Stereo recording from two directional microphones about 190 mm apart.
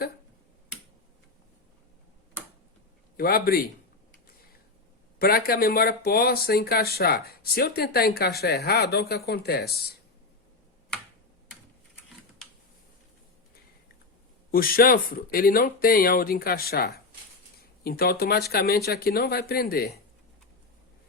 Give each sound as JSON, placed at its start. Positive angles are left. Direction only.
{"t": 3.2, "sound": "speech", "side_deg": 50}
{"t": 5.2, "sound": "speech", "side_deg": 50}
{"t": 14.5, "sound": "speech", "side_deg": 50}